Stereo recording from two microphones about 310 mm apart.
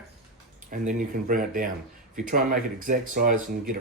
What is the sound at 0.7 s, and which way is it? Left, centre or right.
Speech, right.